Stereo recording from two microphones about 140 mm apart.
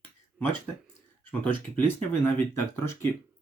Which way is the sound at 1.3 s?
10° left (ahead or behind).